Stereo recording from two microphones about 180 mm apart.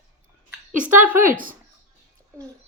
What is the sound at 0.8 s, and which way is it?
Speech, 10° right (ahead or behind).